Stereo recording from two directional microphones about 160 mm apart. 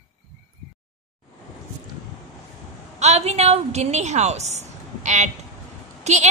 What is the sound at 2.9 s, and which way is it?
A woman's voice, 45° right (ahead or behind).